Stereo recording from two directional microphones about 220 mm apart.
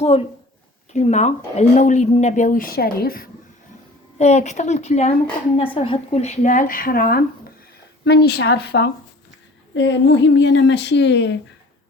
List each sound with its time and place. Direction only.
0.0 s a woman's voice: 25° left (ahead or behind)
4.2 s speech: 30° left (ahead or behind); by 11.3 s 55° left (ahead or behind)